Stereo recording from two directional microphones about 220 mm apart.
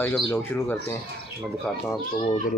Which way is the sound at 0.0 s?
10° left (ahead or behind).